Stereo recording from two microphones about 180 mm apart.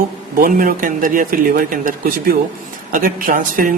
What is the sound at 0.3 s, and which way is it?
A man's voice, 50° right (ahead or behind).